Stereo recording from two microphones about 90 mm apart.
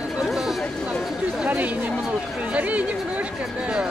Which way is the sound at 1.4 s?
15° right (ahead or behind).